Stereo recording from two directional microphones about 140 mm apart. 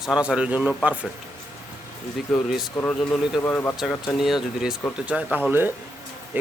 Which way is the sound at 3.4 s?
15° left (ahead or behind).